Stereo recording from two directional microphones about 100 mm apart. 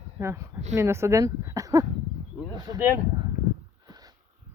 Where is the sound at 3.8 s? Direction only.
40° right (ahead or behind).